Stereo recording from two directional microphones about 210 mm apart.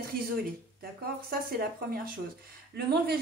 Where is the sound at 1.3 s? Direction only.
45° right (ahead or behind).